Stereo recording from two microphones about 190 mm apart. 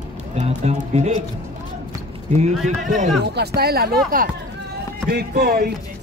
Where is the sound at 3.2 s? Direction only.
60° right (ahead or behind).